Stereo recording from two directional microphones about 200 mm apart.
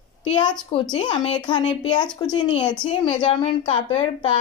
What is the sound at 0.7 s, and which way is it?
A woman's voice, 25° left (ahead or behind).